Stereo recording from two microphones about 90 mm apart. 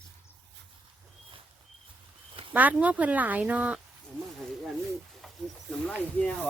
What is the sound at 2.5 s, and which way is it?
Speech, 15° right (ahead or behind).